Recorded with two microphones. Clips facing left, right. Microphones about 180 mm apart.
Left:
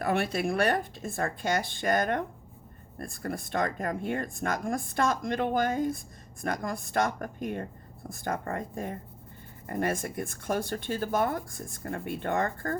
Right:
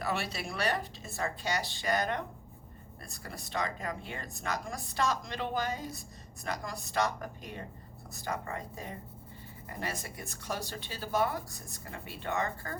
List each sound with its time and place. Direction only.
0.0 s speech: 55° left (ahead or behind)